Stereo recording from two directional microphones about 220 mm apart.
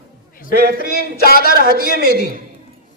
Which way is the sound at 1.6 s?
40° right (ahead or behind).